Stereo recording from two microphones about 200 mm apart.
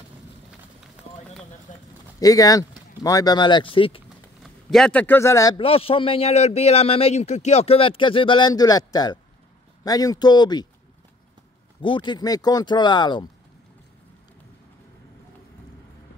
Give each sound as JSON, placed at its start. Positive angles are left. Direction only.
{"t": 1.7, "sound": "a sound", "side_deg": 35}
{"t": 2.1, "sound": "speech", "side_deg": 15}
{"t": 4.4, "sound": "a man's voice", "side_deg": 0}
{"t": 11.8, "sound": "a man's voice", "side_deg": 25}